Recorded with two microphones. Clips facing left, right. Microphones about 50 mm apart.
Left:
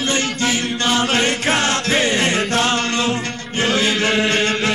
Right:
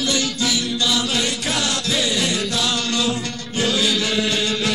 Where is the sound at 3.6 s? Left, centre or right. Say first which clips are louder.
Left 3 dB; left.